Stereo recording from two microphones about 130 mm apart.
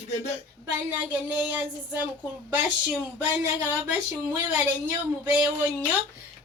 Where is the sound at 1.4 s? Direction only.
15° right (ahead or behind).